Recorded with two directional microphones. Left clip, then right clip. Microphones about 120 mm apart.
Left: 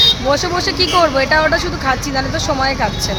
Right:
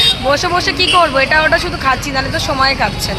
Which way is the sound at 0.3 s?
30° left (ahead or behind).